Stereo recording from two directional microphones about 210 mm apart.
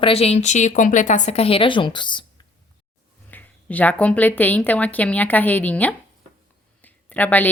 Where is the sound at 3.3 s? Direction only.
10° left (ahead or behind).